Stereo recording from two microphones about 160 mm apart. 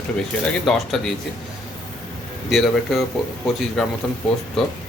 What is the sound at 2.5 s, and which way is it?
Speech, centre (ahead or behind).